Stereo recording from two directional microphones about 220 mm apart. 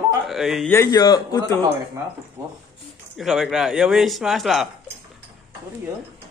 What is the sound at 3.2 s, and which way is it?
Speech, centre (ahead or behind).